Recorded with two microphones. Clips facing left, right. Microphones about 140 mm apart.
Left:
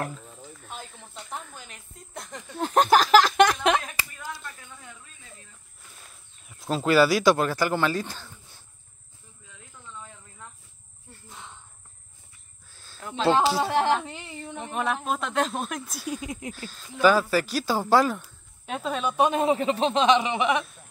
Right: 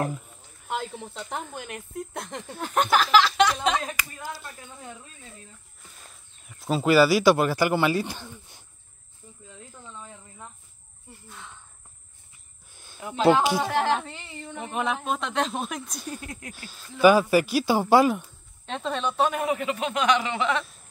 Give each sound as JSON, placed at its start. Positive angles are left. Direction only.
{"t": 0.7, "sound": "speech", "side_deg": -90}
{"t": 2.6, "sound": "a sound", "side_deg": 35}
{"t": 4.3, "sound": "speech", "side_deg": -30}
{"t": 6.6, "sound": "speech", "side_deg": -5}
{"t": 11.2, "sound": "a sound", "side_deg": 20}
{"t": 12.7, "sound": "a sound", "side_deg": -15}
{"t": 13.6, "sound": "speech", "side_deg": 15}
{"t": 14.6, "sound": "speech", "side_deg": 0}
{"t": 16.5, "sound": "speech", "side_deg": -10}
{"t": 18.2, "sound": "snake", "side_deg": 5}
{"t": 19.1, "sound": "speech", "side_deg": 20}